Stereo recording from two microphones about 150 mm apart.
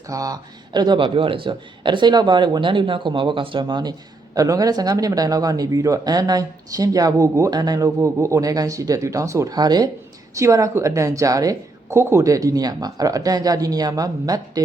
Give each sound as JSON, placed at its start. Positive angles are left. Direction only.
{"t": 0.1, "sound": "speech", "side_deg": -25}